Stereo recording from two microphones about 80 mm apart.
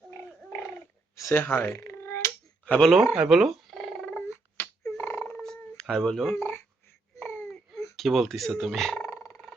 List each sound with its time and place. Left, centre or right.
1.3 s speech: left
1.8 s a sound: left
2.6 s speech: centre
2.9 s purr: centre
4.3 s a sound: left
5.4 s turkey: centre
5.9 s fowl: centre
6.3 s speech: left
7.2 s baby cry: left
7.9 s fowl: centre
9.0 s a sound: left